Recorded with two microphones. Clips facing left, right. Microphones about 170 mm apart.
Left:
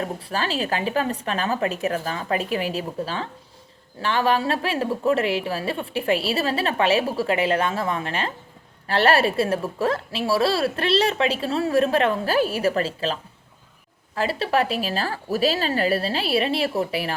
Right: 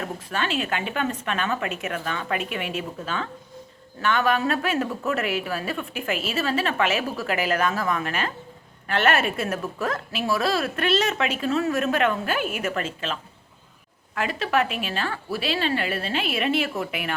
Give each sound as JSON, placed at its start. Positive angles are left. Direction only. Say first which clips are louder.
{"t": 0.0, "sound": "a woman's voice", "louder": "left 2 dB", "side_deg": 35}
{"t": 14.2, "sound": "a woman's voice", "louder": "left 2 dB", "side_deg": 35}